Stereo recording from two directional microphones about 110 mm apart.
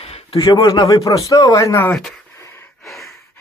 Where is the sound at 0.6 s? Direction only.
35° left (ahead or behind).